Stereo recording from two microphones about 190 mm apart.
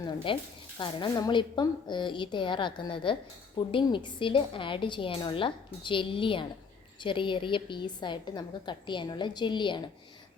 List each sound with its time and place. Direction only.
0.3 s a woman's voice: 25° left (ahead or behind)